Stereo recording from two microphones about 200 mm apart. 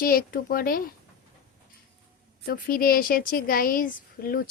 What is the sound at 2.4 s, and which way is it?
A woman's voice, 45° left (ahead or behind).